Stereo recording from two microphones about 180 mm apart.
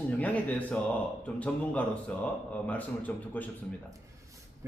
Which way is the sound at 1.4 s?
5° left (ahead or behind).